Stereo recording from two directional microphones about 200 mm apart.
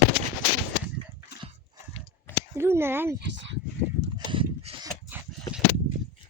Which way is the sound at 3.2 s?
65° right (ahead or behind).